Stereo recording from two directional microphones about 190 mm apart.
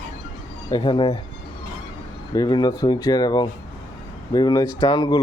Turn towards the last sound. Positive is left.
turn(degrees=25)  # may be behind; listen again after turning